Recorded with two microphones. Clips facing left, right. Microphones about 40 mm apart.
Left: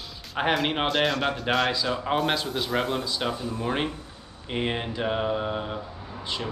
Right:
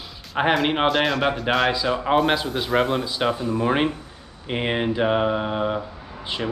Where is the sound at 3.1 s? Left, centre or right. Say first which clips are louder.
Right 6 dB; centre.